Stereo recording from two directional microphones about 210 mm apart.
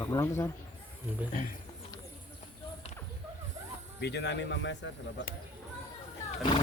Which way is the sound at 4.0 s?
55° left (ahead or behind).